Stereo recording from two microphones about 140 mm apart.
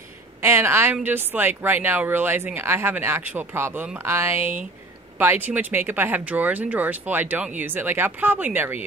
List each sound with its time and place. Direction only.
0.4 s speech: 15° right (ahead or behind)